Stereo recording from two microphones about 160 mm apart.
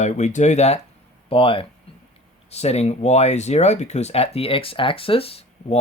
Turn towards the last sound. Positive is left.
turn(degrees=40)  # may be behind; listen again after turning